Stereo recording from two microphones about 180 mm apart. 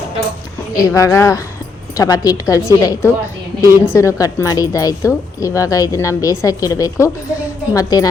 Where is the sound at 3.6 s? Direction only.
15° left (ahead or behind).